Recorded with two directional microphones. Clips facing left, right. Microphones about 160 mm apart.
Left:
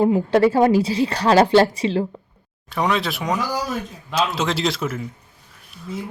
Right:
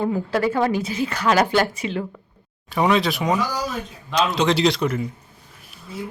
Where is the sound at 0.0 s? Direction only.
25° left (ahead or behind).